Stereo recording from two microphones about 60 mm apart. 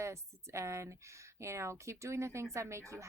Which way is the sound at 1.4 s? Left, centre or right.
Right.